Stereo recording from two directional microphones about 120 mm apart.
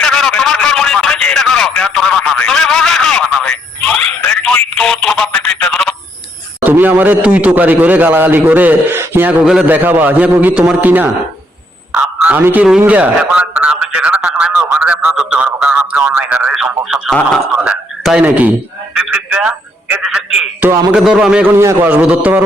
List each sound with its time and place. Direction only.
0.0 s a sound: 5° left (ahead or behind)
6.7 s a man's voice: 15° right (ahead or behind)
11.9 s a sound: 10° right (ahead or behind)
12.8 s a man's voice: 10° right (ahead or behind)
17.1 s speech: 5° left (ahead or behind)
17.6 s speech: 5° right (ahead or behind)
18.9 s telephone: 10° right (ahead or behind)
20.9 s a man's voice: 5° right (ahead or behind)
21.5 s a man's voice: 20° right (ahead or behind)